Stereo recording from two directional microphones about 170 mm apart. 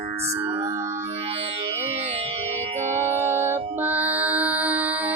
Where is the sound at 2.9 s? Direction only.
15° right (ahead or behind).